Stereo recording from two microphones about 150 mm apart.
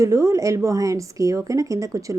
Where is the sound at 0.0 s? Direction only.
20° right (ahead or behind).